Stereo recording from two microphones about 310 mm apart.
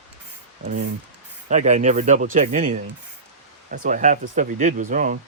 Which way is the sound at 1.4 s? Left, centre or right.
Right.